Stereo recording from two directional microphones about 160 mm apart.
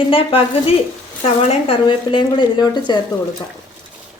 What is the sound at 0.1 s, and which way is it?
A woman's voice, 35° left (ahead or behind).